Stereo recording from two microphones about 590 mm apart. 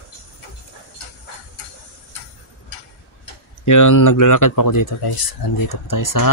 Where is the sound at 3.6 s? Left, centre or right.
Left.